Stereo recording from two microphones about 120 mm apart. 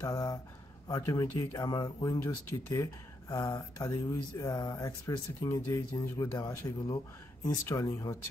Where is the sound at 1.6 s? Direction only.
40° left (ahead or behind).